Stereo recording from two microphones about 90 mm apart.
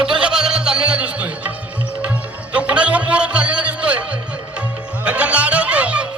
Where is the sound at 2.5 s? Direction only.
15° right (ahead or behind).